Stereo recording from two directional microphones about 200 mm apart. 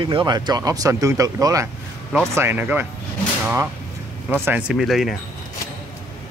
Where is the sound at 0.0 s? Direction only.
25° right (ahead or behind).